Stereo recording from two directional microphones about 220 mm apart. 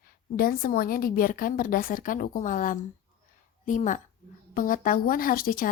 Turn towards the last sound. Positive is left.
turn(degrees=40)  # may be behind; listen again after turning